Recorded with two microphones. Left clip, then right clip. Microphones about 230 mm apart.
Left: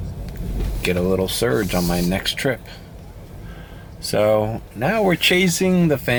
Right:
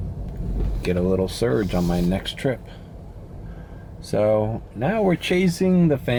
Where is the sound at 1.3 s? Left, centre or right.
Centre.